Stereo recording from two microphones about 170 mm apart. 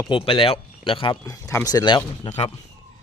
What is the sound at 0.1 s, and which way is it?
Speech, 30° left (ahead or behind).